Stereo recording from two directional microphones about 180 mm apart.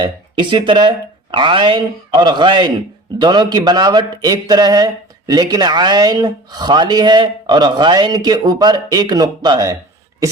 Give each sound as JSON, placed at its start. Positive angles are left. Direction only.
{"t": 0.0, "sound": "a man's voice", "side_deg": -25}